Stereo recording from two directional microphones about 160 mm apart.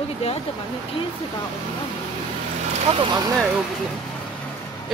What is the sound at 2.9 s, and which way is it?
Speech, 25° right (ahead or behind).